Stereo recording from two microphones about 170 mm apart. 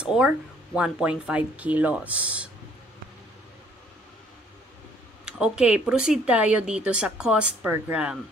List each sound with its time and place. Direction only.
0.0 s speech: 5° right (ahead or behind)
5.2 s speech: 5° right (ahead or behind)